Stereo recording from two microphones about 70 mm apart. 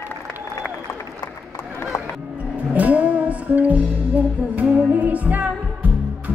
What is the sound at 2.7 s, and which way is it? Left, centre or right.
Music, right.